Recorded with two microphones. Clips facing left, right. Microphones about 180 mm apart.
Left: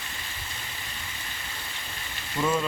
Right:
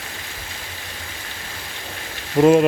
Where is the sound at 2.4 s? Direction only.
70° right (ahead or behind).